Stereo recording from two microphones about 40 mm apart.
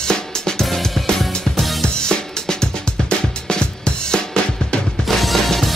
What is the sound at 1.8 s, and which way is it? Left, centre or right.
Music, centre.